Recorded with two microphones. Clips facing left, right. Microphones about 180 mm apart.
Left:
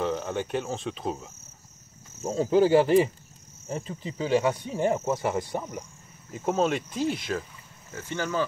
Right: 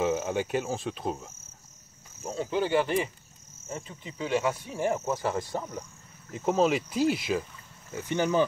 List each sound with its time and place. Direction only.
0.0 s speech: 5° right (ahead or behind)
2.3 s speech: 40° left (ahead or behind); by 7.4 s 5° right (ahead or behind)
7.9 s speech: 15° right (ahead or behind)